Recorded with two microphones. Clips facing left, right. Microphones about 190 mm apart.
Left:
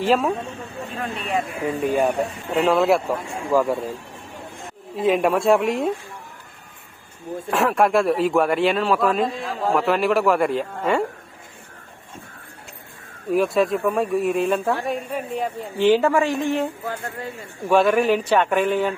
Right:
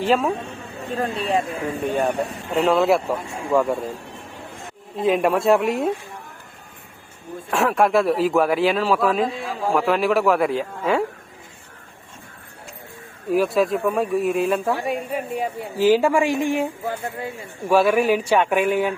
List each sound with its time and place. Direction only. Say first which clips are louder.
0.0 s a man's voice: even; centre (ahead or behind)
0.8 s speech: right 6 dB; 35° right (ahead or behind)
1.6 s a man's voice: left 2 dB; 5° left (ahead or behind)
4.9 s a man's voice: even; centre (ahead or behind)
7.5 s a man's voice: even; centre (ahead or behind)
13.3 s speech: even; centre (ahead or behind)